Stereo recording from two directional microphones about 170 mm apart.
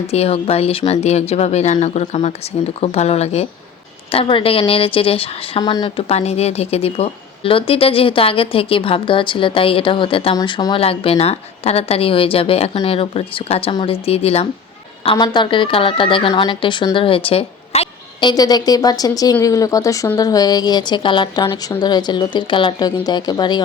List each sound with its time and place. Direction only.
0.1 s a woman's voice: 35° left (ahead or behind)